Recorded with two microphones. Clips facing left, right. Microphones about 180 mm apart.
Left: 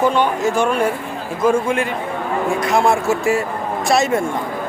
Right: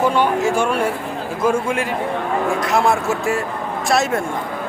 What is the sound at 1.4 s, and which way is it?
Speech, 5° right (ahead or behind).